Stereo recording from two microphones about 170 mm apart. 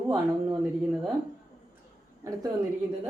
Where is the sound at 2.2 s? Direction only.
20° right (ahead or behind).